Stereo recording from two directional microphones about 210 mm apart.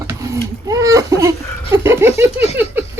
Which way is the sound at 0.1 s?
15° right (ahead or behind).